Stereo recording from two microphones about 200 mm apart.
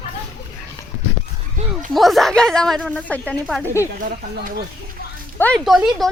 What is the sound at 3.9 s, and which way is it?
Speech, 40° right (ahead or behind).